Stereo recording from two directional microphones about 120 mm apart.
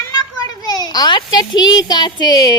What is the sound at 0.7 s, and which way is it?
Speech, 35° left (ahead or behind).